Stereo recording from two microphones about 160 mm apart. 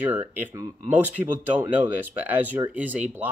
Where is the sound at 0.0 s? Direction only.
10° right (ahead or behind).